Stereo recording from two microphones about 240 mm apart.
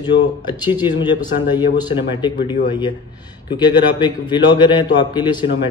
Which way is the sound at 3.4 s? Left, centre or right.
Centre.